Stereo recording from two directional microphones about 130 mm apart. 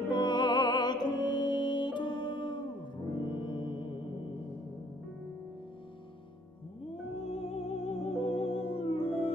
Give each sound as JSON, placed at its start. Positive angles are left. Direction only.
{"t": 0.1, "sound": "music", "side_deg": 35}
{"t": 7.2, "sound": "music", "side_deg": 50}